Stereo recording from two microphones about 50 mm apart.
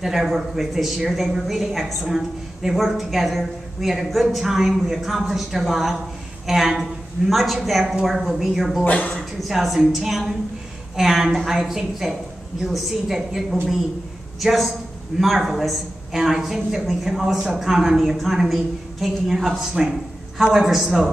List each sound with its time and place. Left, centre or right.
0.0 s a woman's voice: centre
8.8 s speech: left
9.4 s a woman's voice: centre